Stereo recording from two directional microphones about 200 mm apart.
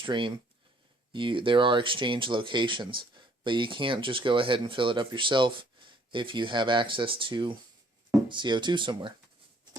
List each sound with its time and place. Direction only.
0.0 s speech: 25° right (ahead or behind)